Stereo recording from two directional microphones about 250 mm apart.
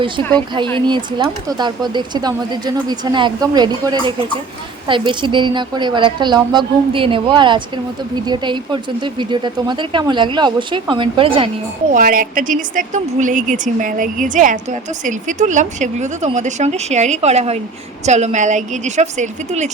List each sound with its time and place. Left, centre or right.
0.3 s a woman's voice: centre
11.9 s a woman's voice: right